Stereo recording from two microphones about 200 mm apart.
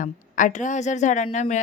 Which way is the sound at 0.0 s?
40° left (ahead or behind).